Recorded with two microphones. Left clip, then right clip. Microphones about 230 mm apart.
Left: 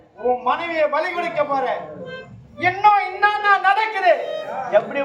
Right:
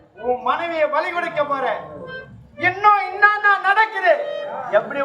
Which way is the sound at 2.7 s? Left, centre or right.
Right.